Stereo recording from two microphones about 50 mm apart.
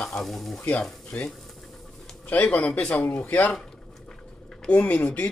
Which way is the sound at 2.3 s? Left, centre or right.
Left.